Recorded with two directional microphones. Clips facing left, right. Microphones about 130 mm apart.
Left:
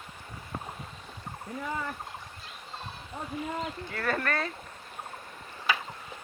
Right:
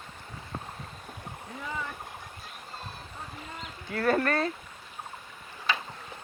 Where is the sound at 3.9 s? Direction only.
35° right (ahead or behind).